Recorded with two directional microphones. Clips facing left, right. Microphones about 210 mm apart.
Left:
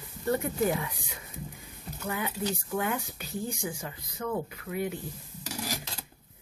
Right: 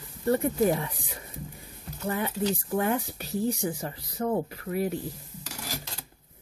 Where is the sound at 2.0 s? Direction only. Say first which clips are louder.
Right 4 dB; 35° right (ahead or behind).